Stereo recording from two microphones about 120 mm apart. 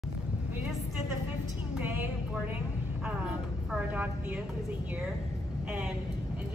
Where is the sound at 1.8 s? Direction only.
15° right (ahead or behind).